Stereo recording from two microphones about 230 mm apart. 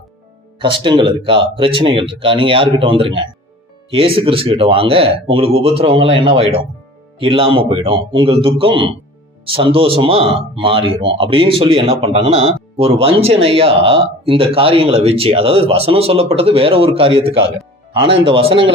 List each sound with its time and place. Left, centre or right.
0.6 s speech: right